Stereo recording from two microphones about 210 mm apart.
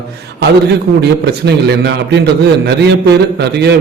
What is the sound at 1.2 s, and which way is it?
A man's voice, 50° right (ahead or behind).